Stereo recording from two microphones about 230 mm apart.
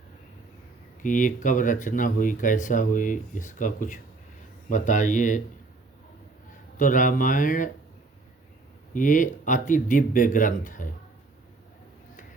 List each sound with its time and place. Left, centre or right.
1.0 s speech: left
6.7 s speech: left
8.9 s speech: left